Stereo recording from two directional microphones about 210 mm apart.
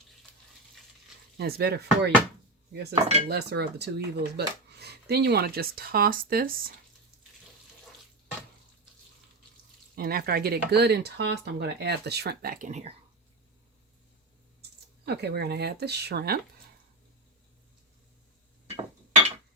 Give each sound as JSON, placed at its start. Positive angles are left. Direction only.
{"t": 0.3, "sound": "stir", "side_deg": 5}
{"t": 1.4, "sound": "speech", "side_deg": -50}
{"t": 2.9, "sound": "cutlery", "side_deg": -30}
{"t": 3.2, "sound": "speech", "side_deg": -55}
{"t": 9.9, "sound": "speech", "side_deg": -45}
{"t": 15.0, "sound": "speech", "side_deg": -50}